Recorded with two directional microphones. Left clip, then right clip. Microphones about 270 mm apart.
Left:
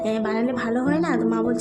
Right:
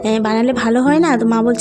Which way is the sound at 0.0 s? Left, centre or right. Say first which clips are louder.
Right 8 dB; right.